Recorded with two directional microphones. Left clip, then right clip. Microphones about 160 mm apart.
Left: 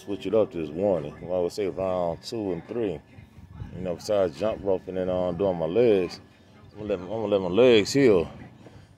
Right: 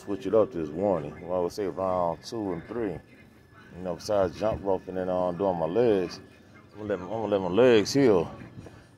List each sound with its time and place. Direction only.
0.1 s speech: 20° left (ahead or behind)
4.4 s speech: 30° left (ahead or behind)